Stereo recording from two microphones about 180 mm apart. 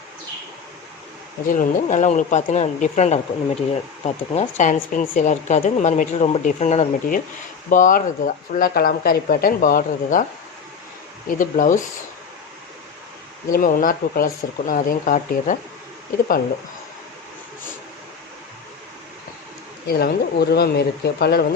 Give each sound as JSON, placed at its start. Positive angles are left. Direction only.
{"t": 1.5, "sound": "speech", "side_deg": 45}
{"t": 11.3, "sound": "speech", "side_deg": 50}
{"t": 13.5, "sound": "speech", "side_deg": 50}
{"t": 19.9, "sound": "speech", "side_deg": 60}